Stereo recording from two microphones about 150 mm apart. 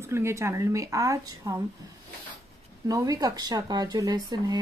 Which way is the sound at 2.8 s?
25° right (ahead or behind).